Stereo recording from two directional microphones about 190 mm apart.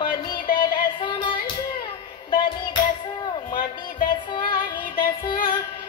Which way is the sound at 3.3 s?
25° left (ahead or behind).